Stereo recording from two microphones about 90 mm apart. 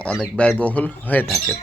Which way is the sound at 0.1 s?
10° left (ahead or behind).